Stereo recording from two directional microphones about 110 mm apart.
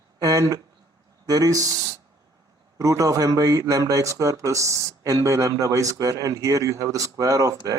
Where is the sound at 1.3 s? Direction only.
35° right (ahead or behind).